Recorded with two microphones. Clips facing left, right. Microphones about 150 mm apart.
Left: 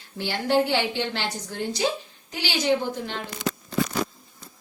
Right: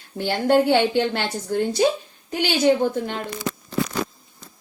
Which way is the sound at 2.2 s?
55° right (ahead or behind).